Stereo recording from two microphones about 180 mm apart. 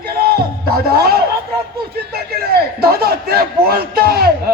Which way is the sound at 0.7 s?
60° right (ahead or behind).